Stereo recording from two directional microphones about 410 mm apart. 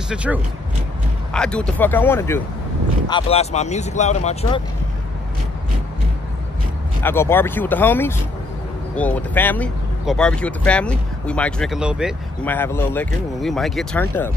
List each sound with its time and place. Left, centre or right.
0.1 s speech: centre
7.0 s speech: centre